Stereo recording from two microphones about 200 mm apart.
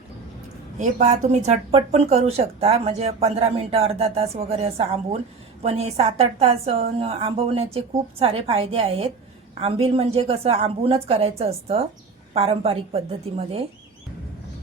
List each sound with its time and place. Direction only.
0.8 s a woman's voice: 35° right (ahead or behind)